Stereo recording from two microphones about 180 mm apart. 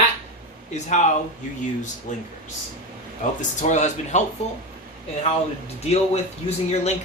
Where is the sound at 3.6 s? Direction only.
40° left (ahead or behind).